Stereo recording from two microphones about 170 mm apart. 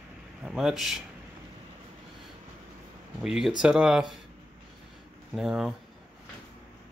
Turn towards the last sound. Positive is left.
turn(degrees=-5)  # may be behind; listen again after turning